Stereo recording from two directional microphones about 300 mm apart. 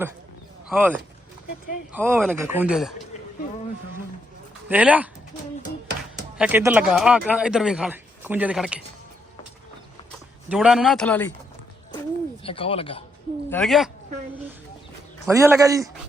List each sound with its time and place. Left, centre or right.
0.7 s speech: centre
4.7 s speech: centre
6.3 s speech: centre
10.5 s speech: centre
11.9 s bird: centre
13.5 s speech: centre
15.3 s a man's voice: centre